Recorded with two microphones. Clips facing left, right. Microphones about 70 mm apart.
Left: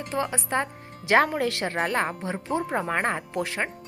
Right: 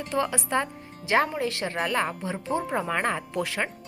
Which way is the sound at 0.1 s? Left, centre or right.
Centre.